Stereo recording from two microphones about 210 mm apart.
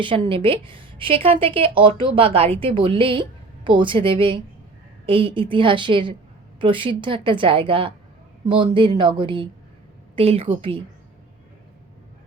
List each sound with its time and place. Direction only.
0.0 s a woman's voice: 25° right (ahead or behind)